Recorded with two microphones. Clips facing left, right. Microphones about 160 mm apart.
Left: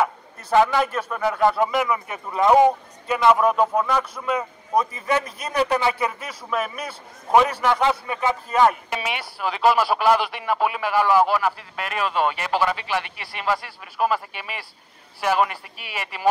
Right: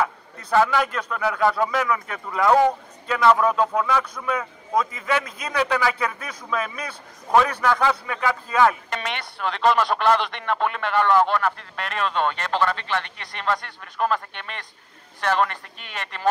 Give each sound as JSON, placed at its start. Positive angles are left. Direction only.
{"t": 0.0, "sound": "a man's voice", "side_deg": 20}
{"t": 0.9, "sound": "a man's voice", "side_deg": 5}
{"t": 1.2, "sound": "a man's voice", "side_deg": 20}
{"t": 4.3, "sound": "speech", "side_deg": 30}
{"t": 6.0, "sound": "a man's voice", "side_deg": 10}
{"t": 7.2, "sound": "a man's voice", "side_deg": 25}